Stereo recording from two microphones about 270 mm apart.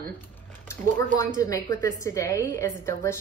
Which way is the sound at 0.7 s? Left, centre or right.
Centre.